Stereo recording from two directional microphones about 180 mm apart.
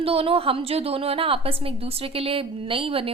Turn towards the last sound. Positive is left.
turn(degrees=-30)  # may be behind; listen again after turning